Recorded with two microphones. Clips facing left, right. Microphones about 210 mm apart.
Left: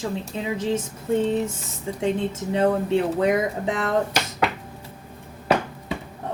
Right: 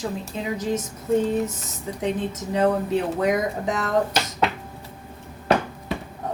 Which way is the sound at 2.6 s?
30° left (ahead or behind).